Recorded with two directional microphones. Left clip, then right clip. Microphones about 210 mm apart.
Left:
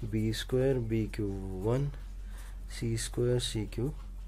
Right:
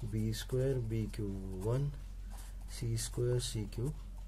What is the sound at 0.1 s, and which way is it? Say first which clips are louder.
Speech: left 7 dB; 10° left (ahead or behind).